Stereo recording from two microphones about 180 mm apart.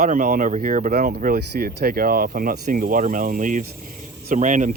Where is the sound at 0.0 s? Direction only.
50° right (ahead or behind).